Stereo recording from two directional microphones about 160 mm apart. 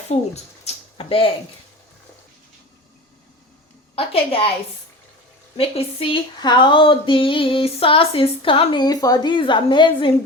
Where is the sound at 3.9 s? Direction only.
35° left (ahead or behind).